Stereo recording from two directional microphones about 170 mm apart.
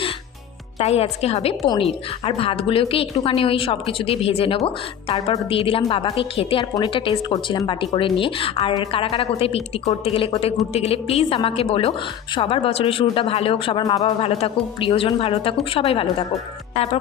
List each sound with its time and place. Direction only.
0.8 s a woman's voice: 40° left (ahead or behind)
14.0 s a woman's voice: 35° left (ahead or behind)